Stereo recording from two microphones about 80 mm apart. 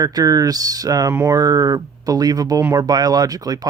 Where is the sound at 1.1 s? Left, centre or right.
Right.